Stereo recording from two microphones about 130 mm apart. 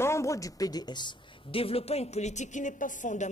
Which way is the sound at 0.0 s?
20° left (ahead or behind).